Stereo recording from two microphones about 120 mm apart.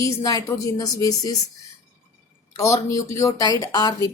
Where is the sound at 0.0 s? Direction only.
30° left (ahead or behind).